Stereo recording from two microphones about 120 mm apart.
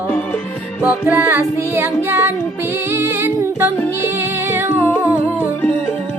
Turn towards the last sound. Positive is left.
turn(degrees=10)  # may be behind; listen again after turning